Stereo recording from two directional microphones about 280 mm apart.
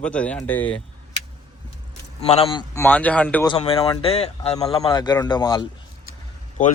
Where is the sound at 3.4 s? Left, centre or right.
Centre.